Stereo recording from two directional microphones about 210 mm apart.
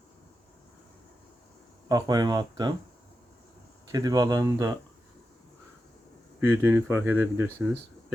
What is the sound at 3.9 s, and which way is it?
Speech, 15° right (ahead or behind).